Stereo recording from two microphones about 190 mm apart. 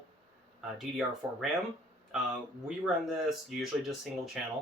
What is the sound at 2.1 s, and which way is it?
Speech, 5° right (ahead or behind).